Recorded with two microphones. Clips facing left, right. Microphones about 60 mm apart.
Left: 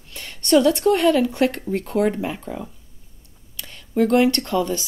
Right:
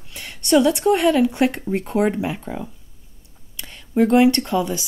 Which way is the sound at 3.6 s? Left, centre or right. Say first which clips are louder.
Right 2 dB; right.